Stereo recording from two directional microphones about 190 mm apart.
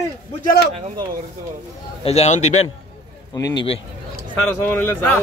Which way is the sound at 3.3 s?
20° left (ahead or behind).